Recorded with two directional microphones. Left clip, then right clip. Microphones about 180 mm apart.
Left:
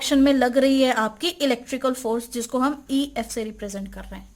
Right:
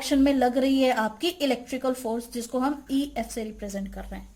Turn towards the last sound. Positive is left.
turn(degrees=40)  # may be behind; listen again after turning